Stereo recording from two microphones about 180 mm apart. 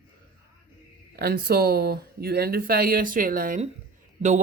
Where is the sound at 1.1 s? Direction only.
60° right (ahead or behind).